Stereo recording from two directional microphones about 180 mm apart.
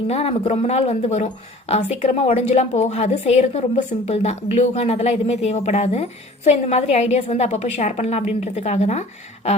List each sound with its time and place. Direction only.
0.1 s speech: 35° left (ahead or behind)